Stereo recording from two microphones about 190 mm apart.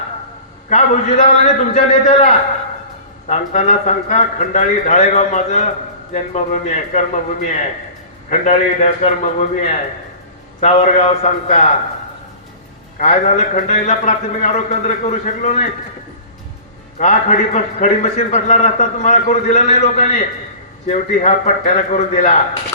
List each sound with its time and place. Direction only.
0.7 s a man's voice: 35° left (ahead or behind)
13.0 s a man's voice: 35° left (ahead or behind)
17.0 s a man's voice: 40° left (ahead or behind)